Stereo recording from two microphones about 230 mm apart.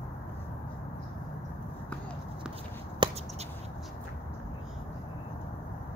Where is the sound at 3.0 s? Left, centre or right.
Right.